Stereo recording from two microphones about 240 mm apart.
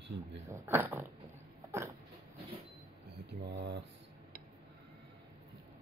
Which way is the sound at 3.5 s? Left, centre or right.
Right.